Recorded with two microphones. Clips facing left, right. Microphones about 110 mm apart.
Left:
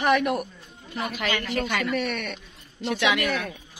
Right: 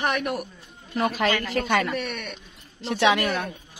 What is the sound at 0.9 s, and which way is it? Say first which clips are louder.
A woman's voice: right 5 dB; 45° right (ahead or behind).